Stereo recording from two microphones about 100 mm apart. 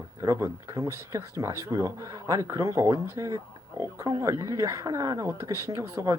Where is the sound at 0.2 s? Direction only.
30° right (ahead or behind).